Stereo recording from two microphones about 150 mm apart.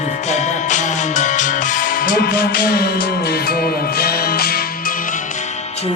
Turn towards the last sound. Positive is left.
turn(degrees=90)